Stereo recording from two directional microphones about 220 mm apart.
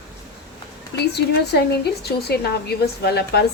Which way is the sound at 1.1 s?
50° left (ahead or behind).